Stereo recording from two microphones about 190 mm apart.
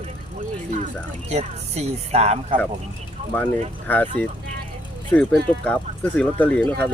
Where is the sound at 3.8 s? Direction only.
10° left (ahead or behind).